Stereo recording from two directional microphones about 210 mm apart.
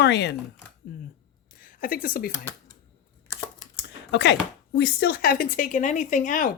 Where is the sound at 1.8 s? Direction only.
40° left (ahead or behind).